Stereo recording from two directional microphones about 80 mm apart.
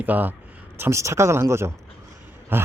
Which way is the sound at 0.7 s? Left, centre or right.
Right.